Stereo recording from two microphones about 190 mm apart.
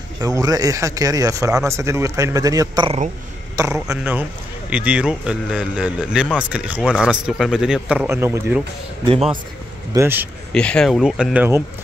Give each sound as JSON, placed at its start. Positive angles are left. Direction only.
{"t": 0.2, "sound": "speech", "side_deg": -20}
{"t": 9.0, "sound": "a man's voice", "side_deg": -30}
{"t": 9.9, "sound": "speech", "side_deg": -10}
{"t": 10.5, "sound": "speech", "side_deg": 5}